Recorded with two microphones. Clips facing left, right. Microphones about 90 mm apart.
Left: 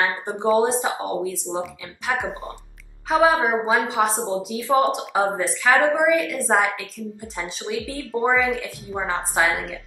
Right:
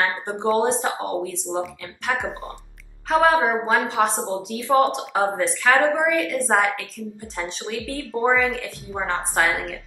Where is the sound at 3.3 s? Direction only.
10° left (ahead or behind).